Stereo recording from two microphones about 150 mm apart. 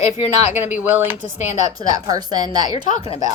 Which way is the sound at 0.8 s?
15° right (ahead or behind).